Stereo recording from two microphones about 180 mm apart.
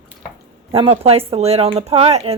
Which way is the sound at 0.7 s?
30° right (ahead or behind).